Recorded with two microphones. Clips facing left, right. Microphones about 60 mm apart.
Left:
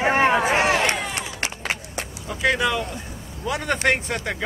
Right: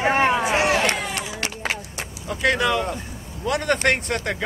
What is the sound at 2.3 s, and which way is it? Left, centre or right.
Speech, centre.